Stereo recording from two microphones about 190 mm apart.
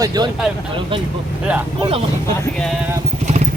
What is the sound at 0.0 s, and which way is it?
Speech, 20° right (ahead or behind).